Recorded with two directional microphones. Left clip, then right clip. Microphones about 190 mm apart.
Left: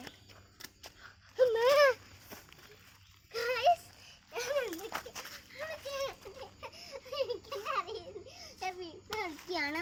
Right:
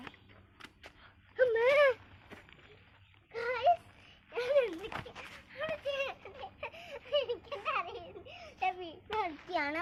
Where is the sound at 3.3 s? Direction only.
60° left (ahead or behind).